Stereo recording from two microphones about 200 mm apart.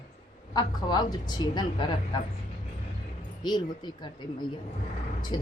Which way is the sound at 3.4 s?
20° left (ahead or behind).